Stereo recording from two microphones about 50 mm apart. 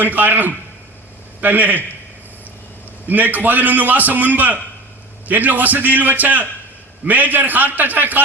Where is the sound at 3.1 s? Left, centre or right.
Right.